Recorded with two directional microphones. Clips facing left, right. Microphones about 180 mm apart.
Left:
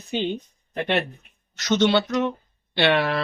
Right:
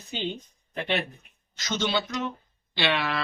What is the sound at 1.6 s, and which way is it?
Speech, 70° left (ahead or behind).